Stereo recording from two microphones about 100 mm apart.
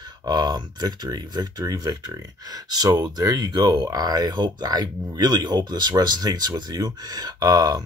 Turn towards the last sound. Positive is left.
turn(degrees=-45)  # may be behind; listen again after turning